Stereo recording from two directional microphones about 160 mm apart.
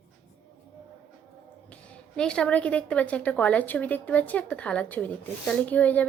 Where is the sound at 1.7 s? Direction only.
5° left (ahead or behind).